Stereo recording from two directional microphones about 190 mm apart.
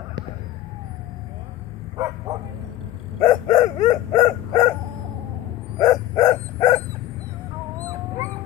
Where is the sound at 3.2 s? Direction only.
25° left (ahead or behind).